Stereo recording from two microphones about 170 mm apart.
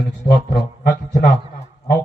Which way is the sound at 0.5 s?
50° left (ahead or behind).